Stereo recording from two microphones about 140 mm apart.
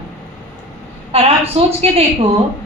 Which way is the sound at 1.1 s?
45° right (ahead or behind).